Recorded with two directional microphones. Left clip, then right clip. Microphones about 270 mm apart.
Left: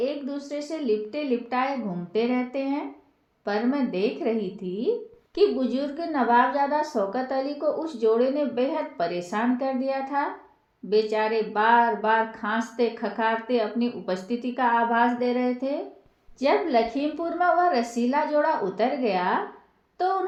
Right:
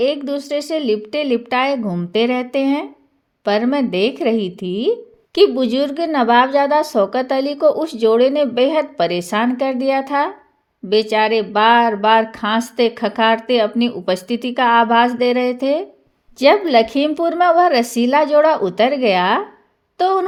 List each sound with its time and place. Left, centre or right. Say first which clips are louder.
0.0 s a woman's voice: right 10 dB; right